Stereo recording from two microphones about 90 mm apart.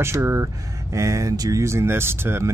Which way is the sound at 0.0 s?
30° right (ahead or behind).